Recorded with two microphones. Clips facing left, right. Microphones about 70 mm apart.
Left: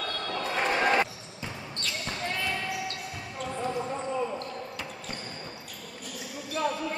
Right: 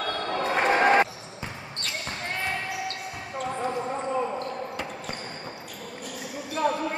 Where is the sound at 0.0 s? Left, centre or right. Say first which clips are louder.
Right 5 dB; right.